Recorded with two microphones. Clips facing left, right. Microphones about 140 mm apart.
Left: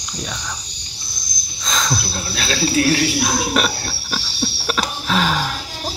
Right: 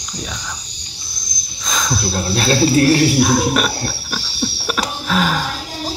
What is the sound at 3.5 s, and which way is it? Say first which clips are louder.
Pig: right 1 dB; centre (ahead or behind).